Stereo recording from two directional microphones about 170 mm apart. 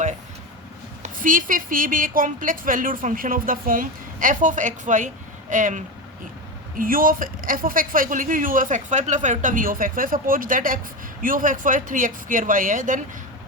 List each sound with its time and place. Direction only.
1.0 s a woman's voice: 50° right (ahead or behind)